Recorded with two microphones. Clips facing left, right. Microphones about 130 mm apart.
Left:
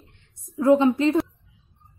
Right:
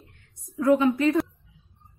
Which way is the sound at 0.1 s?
25° left (ahead or behind).